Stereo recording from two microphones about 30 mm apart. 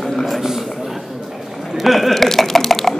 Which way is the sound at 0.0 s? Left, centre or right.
Centre.